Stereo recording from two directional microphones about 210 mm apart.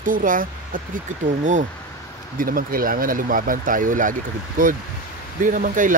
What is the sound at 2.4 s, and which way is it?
Speech, 40° right (ahead or behind).